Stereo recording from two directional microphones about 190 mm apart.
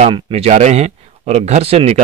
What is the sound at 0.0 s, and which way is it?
Speech, 35° right (ahead or behind).